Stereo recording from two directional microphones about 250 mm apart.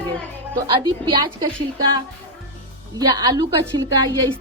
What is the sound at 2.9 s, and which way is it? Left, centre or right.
Speech, centre.